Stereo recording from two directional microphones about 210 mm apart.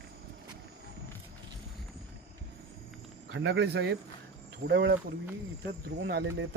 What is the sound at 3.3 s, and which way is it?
Speech, 60° right (ahead or behind).